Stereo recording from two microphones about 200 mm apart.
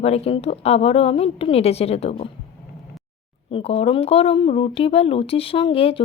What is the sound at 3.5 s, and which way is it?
Speech, 30° left (ahead or behind).